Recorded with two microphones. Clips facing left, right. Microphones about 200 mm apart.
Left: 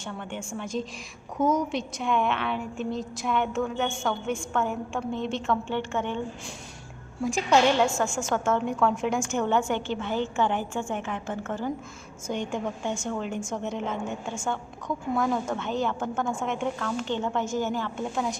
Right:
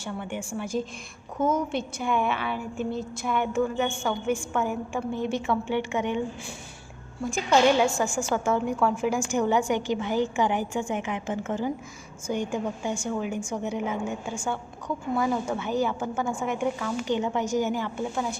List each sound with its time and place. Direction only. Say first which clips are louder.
0.0 s a woman's voice: right 2 dB; 5° right (ahead or behind)
1.4 s a woman's voice: left 1 dB; 25° right (ahead or behind)
1.7 s a woman's voice: even; 5° right (ahead or behind)
7.9 s a woman's voice: right 1 dB; 15° right (ahead or behind)